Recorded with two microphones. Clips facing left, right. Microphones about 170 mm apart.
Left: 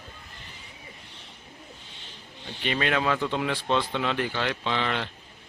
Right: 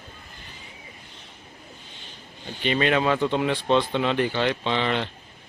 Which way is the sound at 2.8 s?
15° right (ahead or behind).